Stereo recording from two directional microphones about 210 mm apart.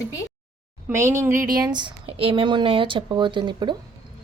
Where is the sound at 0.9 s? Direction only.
15° right (ahead or behind).